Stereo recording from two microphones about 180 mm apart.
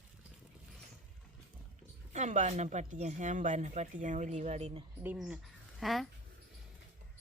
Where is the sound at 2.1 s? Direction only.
40° right (ahead or behind).